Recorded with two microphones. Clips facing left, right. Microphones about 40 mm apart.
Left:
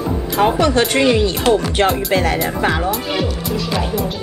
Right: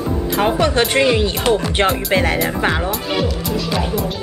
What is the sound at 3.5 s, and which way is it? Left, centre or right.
Speech, centre.